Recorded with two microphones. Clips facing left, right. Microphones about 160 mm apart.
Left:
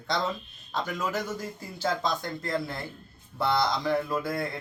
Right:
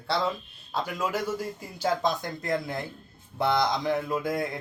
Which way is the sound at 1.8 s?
15° right (ahead or behind).